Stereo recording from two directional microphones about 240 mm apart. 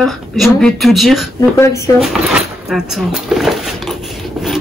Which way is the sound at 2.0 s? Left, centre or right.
Centre.